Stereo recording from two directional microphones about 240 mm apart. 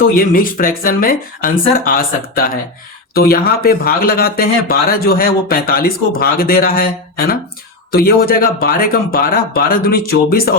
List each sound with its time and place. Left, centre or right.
0.0 s speech: left
7.9 s speech: left